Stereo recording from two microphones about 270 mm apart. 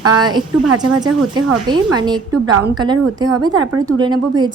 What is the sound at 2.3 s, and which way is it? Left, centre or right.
Speech, right.